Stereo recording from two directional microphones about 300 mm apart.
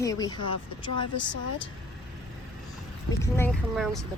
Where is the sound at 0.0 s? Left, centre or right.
Centre.